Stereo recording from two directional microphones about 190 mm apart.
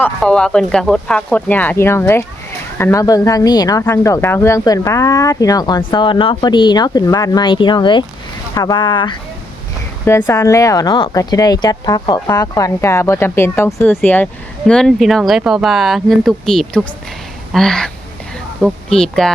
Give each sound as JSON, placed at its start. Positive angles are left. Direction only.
{"t": 0.0, "sound": "speech", "side_deg": 5}
{"t": 10.1, "sound": "speech", "side_deg": 10}